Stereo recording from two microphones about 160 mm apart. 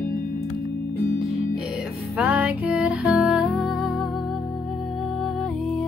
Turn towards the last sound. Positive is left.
turn(degrees=0)  # may be behind; listen again after turning